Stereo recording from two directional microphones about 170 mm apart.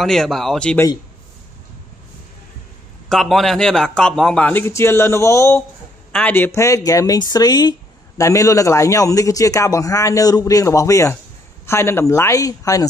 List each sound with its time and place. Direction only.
0.0 s a man's voice: centre (ahead or behind)
3.1 s a man's voice: centre (ahead or behind); by 12.8 s 20° left (ahead or behind)